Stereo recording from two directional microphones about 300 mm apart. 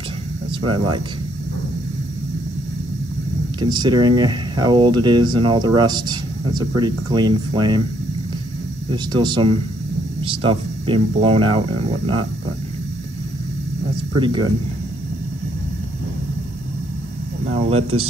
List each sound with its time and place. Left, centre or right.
0.5 s speech: centre
3.5 s speech: centre
8.9 s speech: centre
14.2 s speech: centre
17.5 s speech: right